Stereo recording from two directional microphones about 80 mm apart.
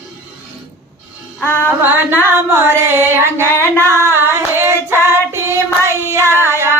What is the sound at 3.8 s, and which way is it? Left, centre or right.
Female singing, right.